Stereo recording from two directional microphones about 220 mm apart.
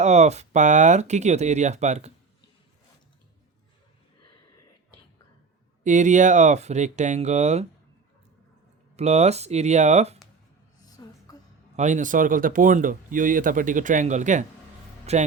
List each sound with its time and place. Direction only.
0.0 s speech: 30° right (ahead or behind)
5.8 s speech: 35° right (ahead or behind)
9.0 s speech: 30° right (ahead or behind)
10.8 s a sound: 15° left (ahead or behind)
11.8 s a man's voice: 35° right (ahead or behind)